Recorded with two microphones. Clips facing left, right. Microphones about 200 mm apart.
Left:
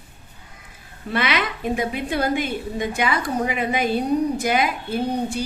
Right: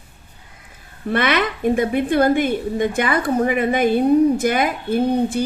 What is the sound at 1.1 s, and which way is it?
A woman's voice, 50° right (ahead or behind).